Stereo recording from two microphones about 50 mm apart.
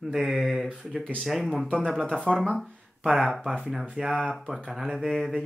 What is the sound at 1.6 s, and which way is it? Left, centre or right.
Speech, centre.